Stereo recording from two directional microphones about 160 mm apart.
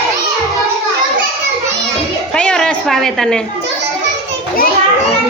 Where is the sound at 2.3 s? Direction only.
5° left (ahead or behind).